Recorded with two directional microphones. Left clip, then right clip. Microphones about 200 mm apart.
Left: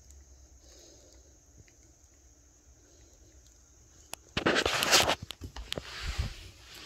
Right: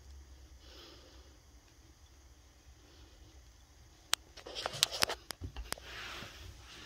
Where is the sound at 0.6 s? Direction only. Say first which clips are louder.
Right 2 dB; 15° right (ahead or behind).